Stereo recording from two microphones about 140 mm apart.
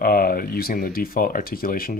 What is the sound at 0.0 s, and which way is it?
Speech, 90° left.